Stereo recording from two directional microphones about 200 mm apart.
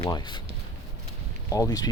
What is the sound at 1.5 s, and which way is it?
Speech, 15° left (ahead or behind).